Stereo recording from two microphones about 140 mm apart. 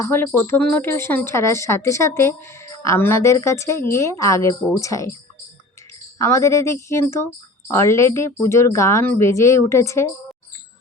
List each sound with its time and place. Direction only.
0.0 s a woman's voice: 15° left (ahead or behind)
6.1 s a woman's voice: 20° left (ahead or behind)